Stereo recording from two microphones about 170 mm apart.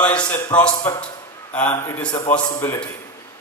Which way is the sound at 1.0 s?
10° left (ahead or behind).